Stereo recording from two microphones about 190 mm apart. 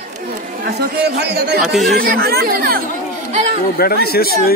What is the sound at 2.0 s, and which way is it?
Speech, 55° right (ahead or behind).